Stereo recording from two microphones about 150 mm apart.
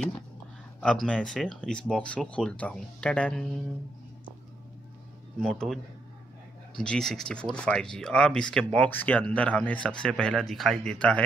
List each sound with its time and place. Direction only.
0.7 s speech: 5° left (ahead or behind)
5.4 s speech: centre (ahead or behind)
6.8 s speech: 5° left (ahead or behind)